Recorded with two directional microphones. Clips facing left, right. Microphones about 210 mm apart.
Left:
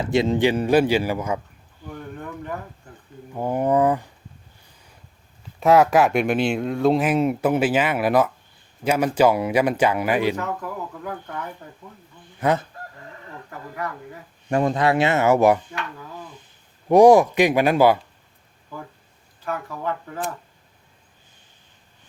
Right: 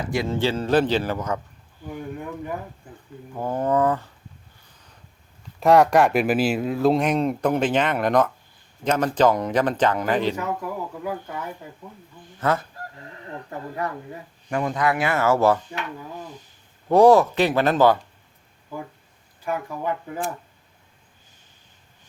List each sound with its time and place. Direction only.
0.0 s speech: 25° left (ahead or behind)
1.9 s speech: 10° right (ahead or behind)
3.3 s speech: 15° left (ahead or behind)
5.5 s speech: centre (ahead or behind)
10.3 s speech: 10° right (ahead or behind)
12.4 s fowl: 15° left (ahead or behind)
13.5 s speech: 25° right (ahead or behind)
14.5 s speech: 30° left (ahead or behind)
16.9 s speech: 15° left (ahead or behind)
19.5 s speech: 15° right (ahead or behind)